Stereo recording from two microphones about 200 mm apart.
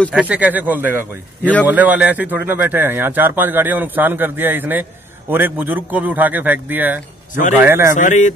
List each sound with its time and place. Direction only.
0.0 s speech: 5° right (ahead or behind)
7.9 s speech: 40° left (ahead or behind)